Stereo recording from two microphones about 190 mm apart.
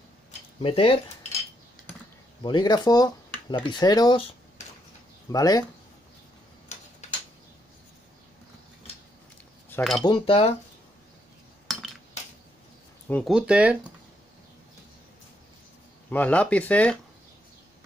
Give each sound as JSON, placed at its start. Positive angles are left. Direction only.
{"t": 0.6, "sound": "speech", "side_deg": 30}
{"t": 2.4, "sound": "speech", "side_deg": 20}
{"t": 5.3, "sound": "speech", "side_deg": 20}
{"t": 9.7, "sound": "cutlery", "side_deg": 10}
{"t": 10.0, "sound": "speech", "side_deg": 25}
{"t": 13.1, "sound": "speech", "side_deg": 0}
{"t": 16.1, "sound": "speech", "side_deg": 10}